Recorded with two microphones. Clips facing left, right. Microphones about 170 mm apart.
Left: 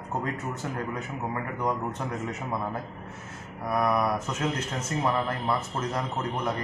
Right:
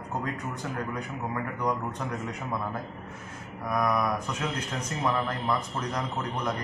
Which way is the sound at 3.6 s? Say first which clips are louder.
Left 1 dB; 10° left (ahead or behind).